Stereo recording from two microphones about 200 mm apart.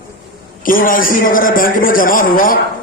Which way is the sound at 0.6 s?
45° left (ahead or behind).